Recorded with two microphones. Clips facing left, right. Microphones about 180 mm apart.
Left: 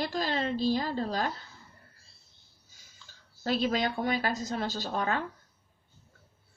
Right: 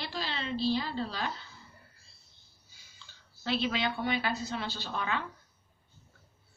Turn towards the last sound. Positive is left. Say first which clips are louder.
# left 4 dB
turn(degrees=45)  # may be behind; listen again after turning